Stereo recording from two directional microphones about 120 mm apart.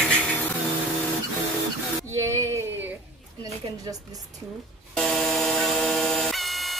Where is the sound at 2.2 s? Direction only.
25° right (ahead or behind).